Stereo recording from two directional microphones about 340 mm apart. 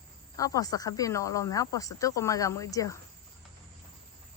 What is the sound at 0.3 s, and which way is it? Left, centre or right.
Speech, centre.